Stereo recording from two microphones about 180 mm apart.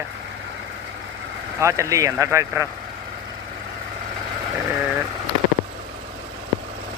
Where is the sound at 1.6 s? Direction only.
15° right (ahead or behind).